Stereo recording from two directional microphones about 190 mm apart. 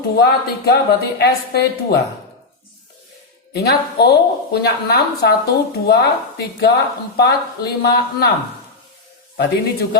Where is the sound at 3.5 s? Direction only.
55° left (ahead or behind).